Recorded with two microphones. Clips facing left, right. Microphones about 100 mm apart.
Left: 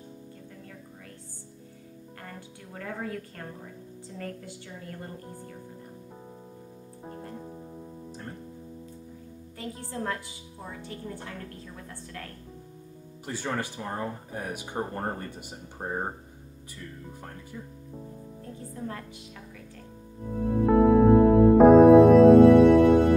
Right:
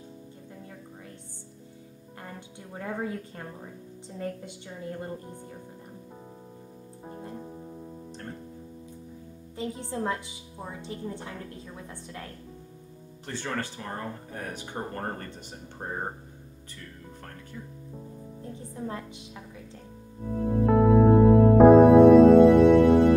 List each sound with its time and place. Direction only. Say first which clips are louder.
2.2 s a woman's voice: right 2 dB; 20° right (ahead or behind)
7.1 s music: even; 10° right (ahead or behind)
7.3 s music: right 1 dB; centre (ahead or behind)
9.6 s a woman's voice: right 3 dB; 20° right (ahead or behind)
13.2 s speech: left 1 dB; 10° left (ahead or behind)
18.5 s music: right 1 dB; 20° right (ahead or behind)
20.3 s music: left 1 dB; centre (ahead or behind)